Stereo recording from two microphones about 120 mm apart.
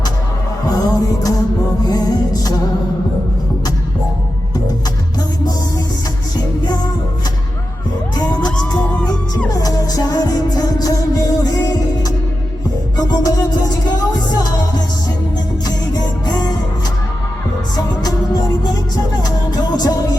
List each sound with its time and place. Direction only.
0.7 s a sound: 30° left (ahead or behind)
1.8 s music: 30° left (ahead or behind)
8.1 s music: 35° left (ahead or behind)
16.2 s music: 35° left (ahead or behind)
18.0 s music: 35° left (ahead or behind)